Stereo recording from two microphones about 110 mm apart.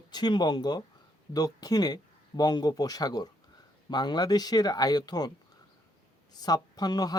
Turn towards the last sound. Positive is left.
turn(degrees=40)  # may be behind; listen again after turning